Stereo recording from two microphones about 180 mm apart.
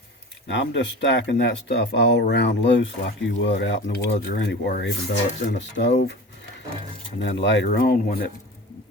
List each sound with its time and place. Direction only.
0.4 s speech: 85° left
4.3 s speech: 60° left (ahead or behind)
7.2 s speech: 80° left; by 8.3 s 60° left (ahead or behind)